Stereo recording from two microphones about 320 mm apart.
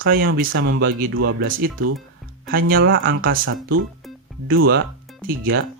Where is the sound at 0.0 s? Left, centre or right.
Right.